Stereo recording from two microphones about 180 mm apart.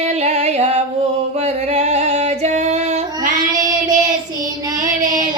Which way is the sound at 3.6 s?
20° right (ahead or behind).